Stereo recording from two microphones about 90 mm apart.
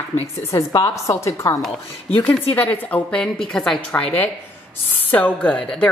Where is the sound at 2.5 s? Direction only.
20° left (ahead or behind).